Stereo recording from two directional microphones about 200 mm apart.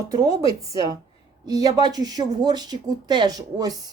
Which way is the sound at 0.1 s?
20° right (ahead or behind).